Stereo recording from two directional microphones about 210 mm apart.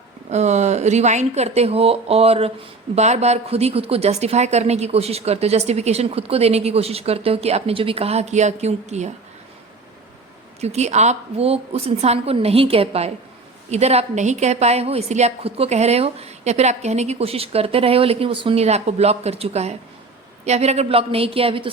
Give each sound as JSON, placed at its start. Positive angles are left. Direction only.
{"t": 0.3, "sound": "a woman's voice", "side_deg": -30}
{"t": 10.6, "sound": "a woman's voice", "side_deg": -30}